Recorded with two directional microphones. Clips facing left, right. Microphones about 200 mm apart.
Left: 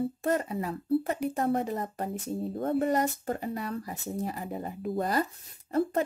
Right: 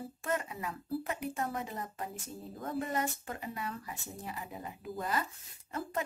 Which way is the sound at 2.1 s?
65° left (ahead or behind).